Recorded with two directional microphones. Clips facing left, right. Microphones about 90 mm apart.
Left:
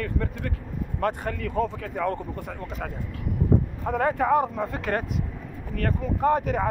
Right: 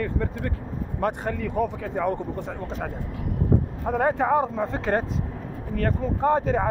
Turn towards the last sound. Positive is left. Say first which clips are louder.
# right 1 dB
turn(degrees=-30)  # may be behind; listen again after turning